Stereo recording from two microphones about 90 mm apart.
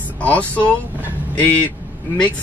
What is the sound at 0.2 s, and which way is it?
Speech, 15° left (ahead or behind).